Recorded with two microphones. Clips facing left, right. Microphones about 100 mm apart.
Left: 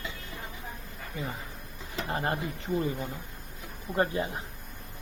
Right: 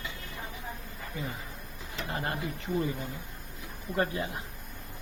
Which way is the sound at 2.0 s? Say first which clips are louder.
Left 4 dB; 30° left (ahead or behind).